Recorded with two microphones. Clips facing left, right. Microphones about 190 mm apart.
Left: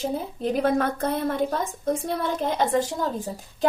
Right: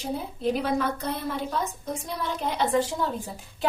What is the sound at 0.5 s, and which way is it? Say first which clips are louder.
A woman's voice: left 5 dB; 55° left (ahead or behind).